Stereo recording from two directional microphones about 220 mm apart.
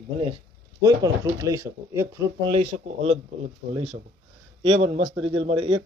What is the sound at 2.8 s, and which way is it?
Speech, 30° right (ahead or behind).